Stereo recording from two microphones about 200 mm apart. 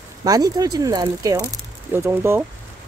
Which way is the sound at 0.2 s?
20° right (ahead or behind).